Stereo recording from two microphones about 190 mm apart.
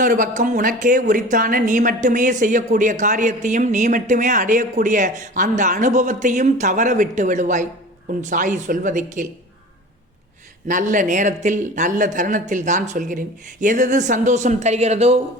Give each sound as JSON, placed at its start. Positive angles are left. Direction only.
{"t": 0.0, "sound": "speech", "side_deg": -45}
{"t": 10.7, "sound": "speech", "side_deg": -40}